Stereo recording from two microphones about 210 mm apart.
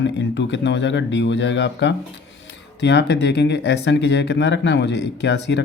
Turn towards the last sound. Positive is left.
turn(degrees=55)  # may be behind; listen again after turning